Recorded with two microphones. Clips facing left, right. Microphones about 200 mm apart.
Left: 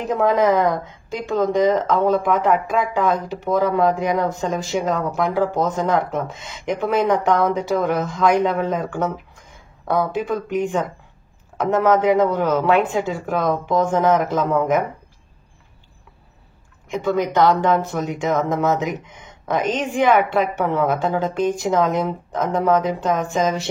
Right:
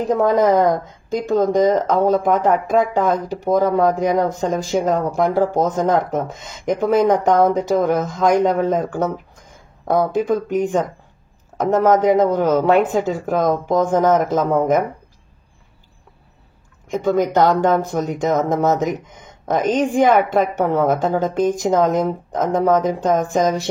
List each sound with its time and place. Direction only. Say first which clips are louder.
0.1 s speech: right 2 dB; 40° right (ahead or behind)
16.9 s speech: right 3 dB; 45° right (ahead or behind)